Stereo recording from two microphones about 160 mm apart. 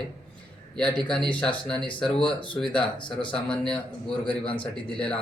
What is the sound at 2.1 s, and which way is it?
Speech, 30° left (ahead or behind).